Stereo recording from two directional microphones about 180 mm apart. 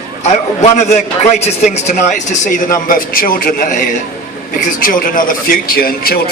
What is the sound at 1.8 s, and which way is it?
A man's voice, 45° left (ahead or behind).